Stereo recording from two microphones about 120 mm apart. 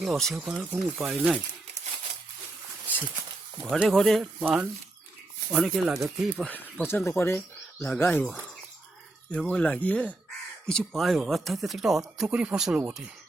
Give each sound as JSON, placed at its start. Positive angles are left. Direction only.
{"t": 0.0, "sound": "speech", "side_deg": 0}
{"t": 3.6, "sound": "speech", "side_deg": 0}
{"t": 4.4, "sound": "speech", "side_deg": -15}
{"t": 5.5, "sound": "speech", "side_deg": 0}
{"t": 6.5, "sound": "speech", "side_deg": 15}
{"t": 9.3, "sound": "speech", "side_deg": 10}